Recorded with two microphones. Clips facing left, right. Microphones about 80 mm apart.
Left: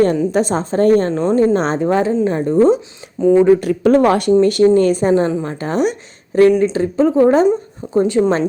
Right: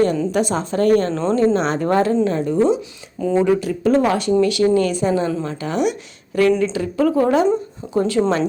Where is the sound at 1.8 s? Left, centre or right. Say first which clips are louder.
Left 2 dB; centre.